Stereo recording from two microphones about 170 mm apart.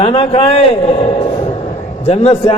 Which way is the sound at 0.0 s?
30° left (ahead or behind).